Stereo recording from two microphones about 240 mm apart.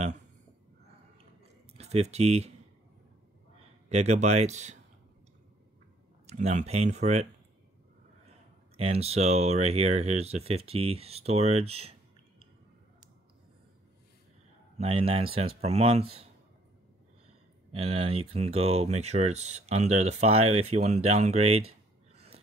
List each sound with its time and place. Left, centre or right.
1.8 s speech: right
3.9 s speech: right
6.2 s speech: right
8.7 s speech: right
14.8 s speech: right
17.7 s speech: right
22.1 s a sound: right